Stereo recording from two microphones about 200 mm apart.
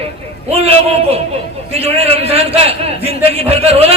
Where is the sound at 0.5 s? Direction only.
30° right (ahead or behind).